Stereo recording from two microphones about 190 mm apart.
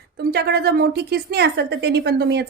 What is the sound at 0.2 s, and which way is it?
A woman's voice, 55° right (ahead or behind).